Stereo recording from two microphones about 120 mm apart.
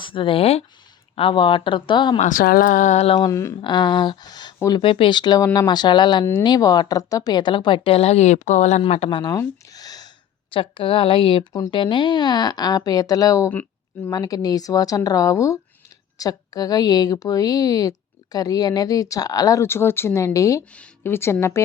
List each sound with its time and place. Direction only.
0.0 s speech: 45° left (ahead or behind)
2.1 s speech: 90° left; by 3.2 s 65° left (ahead or behind)
3.2 s a woman's voice: 30° left (ahead or behind); by 8.8 s 80° left
9.0 s a woman's voice: 35° left (ahead or behind)
9.4 s a sound: 30° left (ahead or behind)
10.5 s a woman's voice: 45° left (ahead or behind); by 13.5 s 30° left (ahead or behind)
13.5 s a sound: 15° left (ahead or behind)
14.1 s a woman's voice: 30° left (ahead or behind)
20.7 s speech: 15° left (ahead or behind)